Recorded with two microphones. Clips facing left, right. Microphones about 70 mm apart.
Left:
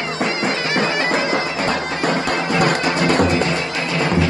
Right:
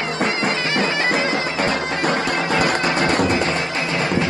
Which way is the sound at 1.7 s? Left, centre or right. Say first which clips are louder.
Left 1 dB; left.